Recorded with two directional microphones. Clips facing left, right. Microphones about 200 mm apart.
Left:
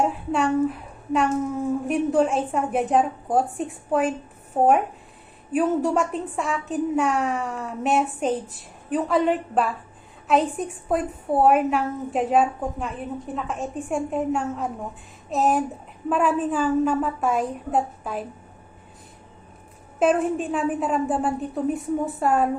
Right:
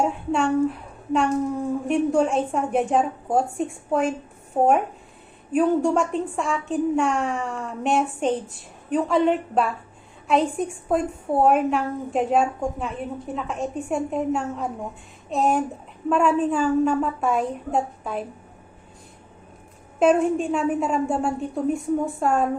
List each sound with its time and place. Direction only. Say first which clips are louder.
0.0 s speech: even; 5° left (ahead or behind)
5.5 s speech: right 2 dB; 5° left (ahead or behind)
20.0 s speech: right 2 dB; centre (ahead or behind)